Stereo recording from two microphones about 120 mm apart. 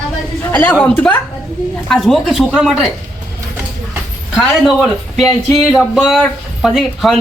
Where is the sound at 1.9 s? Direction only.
Centre (ahead or behind).